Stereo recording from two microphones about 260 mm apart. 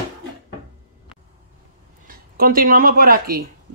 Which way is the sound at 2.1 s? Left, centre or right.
Right.